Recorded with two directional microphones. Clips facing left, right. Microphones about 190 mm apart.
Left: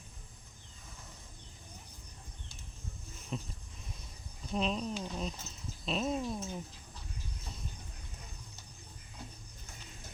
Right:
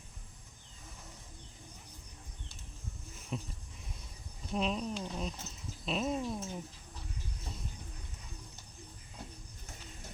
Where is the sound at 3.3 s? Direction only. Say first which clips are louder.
Even; 5° right (ahead or behind).